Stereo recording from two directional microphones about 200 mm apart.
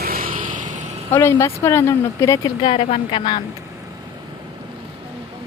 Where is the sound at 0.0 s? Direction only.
45° right (ahead or behind).